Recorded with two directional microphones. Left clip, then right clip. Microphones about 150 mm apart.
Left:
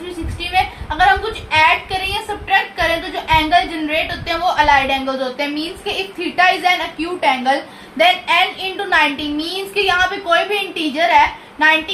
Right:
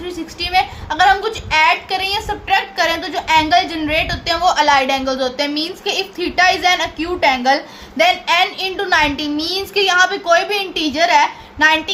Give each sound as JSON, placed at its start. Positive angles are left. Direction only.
{"t": 0.5, "sound": "a woman's voice", "side_deg": -35}